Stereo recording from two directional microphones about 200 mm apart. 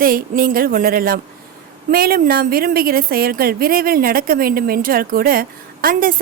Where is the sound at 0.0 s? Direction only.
45° right (ahead or behind).